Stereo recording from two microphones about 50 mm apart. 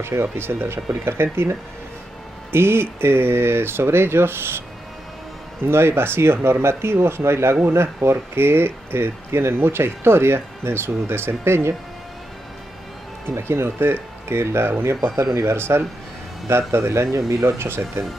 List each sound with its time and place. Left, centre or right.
0.0 s speech: right
5.7 s speech: right
13.4 s speech: right